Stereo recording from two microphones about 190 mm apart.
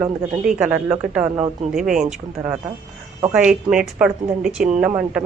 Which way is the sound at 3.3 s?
5° right (ahead or behind).